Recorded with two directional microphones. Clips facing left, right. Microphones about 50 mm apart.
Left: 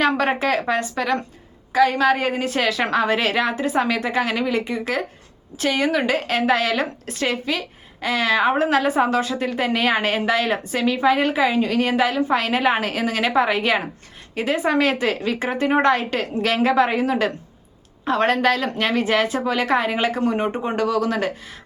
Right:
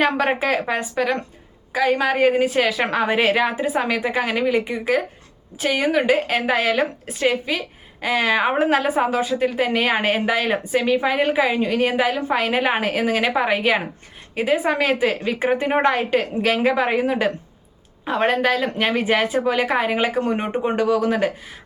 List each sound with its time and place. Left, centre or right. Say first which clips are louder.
0.2 s a woman's voice: even; centre